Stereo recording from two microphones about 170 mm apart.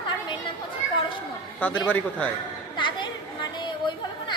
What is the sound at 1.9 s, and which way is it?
Speech, 10° left (ahead or behind).